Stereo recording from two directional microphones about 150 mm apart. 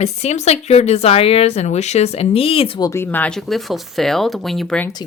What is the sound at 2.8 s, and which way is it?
Speech, 15° left (ahead or behind).